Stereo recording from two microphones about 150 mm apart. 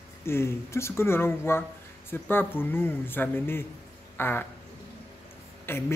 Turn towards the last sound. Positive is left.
turn(degrees=15)  # may be behind; listen again after turning